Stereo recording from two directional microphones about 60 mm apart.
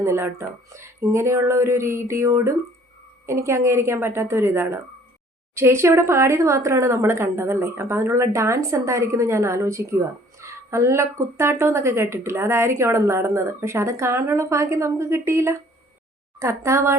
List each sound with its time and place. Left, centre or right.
0.0 s speech: right